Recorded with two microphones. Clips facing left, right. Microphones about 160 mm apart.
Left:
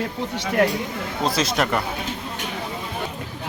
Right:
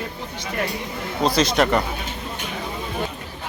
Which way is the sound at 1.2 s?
Centre (ahead or behind).